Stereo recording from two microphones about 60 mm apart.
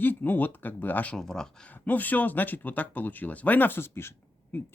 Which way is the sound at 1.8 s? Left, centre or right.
Left.